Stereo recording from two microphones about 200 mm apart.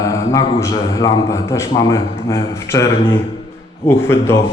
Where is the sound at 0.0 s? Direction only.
15° left (ahead or behind).